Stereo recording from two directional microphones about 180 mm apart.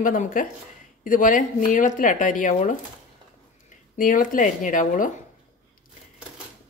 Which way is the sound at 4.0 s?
50° left (ahead or behind).